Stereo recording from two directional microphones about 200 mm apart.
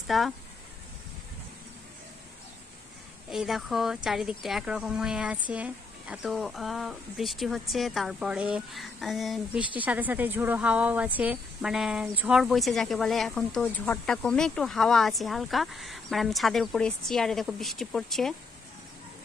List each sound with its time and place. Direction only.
0.0 s speech: centre (ahead or behind)
3.3 s a woman's voice: centre (ahead or behind)